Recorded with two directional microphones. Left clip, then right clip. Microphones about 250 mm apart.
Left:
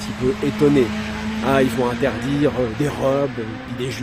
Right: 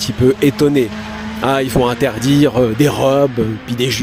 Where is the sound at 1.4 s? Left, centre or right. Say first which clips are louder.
Right 4 dB; right.